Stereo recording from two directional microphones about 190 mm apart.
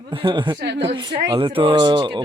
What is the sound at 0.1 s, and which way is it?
Speech, 25° right (ahead or behind).